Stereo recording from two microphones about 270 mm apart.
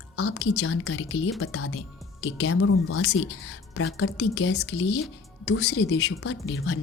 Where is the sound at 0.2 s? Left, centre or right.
Left.